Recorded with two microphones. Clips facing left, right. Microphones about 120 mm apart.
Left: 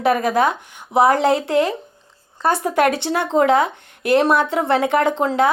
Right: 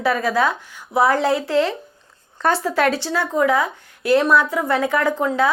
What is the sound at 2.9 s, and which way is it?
Speech, 60° left (ahead or behind).